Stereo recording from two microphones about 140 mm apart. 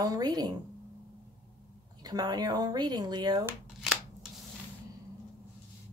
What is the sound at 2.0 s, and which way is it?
Speech, 30° right (ahead or behind).